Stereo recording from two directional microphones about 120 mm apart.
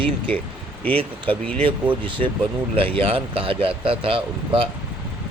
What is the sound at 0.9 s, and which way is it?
Speech, 45° right (ahead or behind).